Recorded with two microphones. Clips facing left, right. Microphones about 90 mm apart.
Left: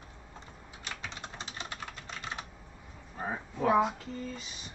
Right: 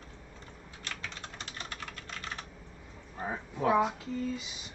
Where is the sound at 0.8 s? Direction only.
20° left (ahead or behind).